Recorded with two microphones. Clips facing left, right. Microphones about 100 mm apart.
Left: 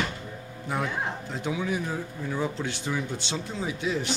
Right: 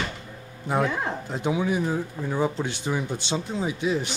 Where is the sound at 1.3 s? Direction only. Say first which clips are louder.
Right 5 dB; 20° right (ahead or behind).